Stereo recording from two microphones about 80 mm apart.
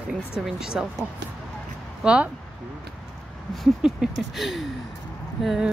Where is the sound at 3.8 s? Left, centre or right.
Centre.